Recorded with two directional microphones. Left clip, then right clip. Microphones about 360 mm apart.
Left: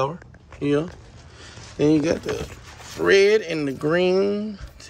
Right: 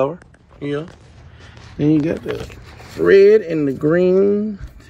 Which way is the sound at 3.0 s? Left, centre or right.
Right.